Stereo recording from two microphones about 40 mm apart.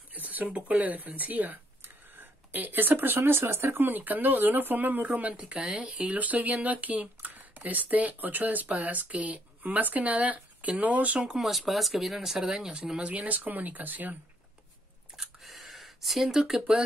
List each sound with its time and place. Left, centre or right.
0.1 s a sound: right
0.8 s speech: right
5.3 s speech: right
6.1 s speech: right
11.4 s speech: centre; by 13.1 s right
13.1 s speech: right
15.1 s a sound: centre
16.3 s speech: centre